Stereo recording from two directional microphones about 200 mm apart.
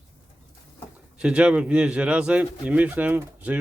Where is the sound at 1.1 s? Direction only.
5° right (ahead or behind).